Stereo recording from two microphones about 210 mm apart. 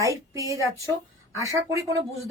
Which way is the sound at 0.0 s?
15° right (ahead or behind).